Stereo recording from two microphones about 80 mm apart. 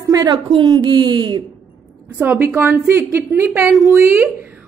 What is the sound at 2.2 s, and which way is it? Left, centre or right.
A woman's voice, centre.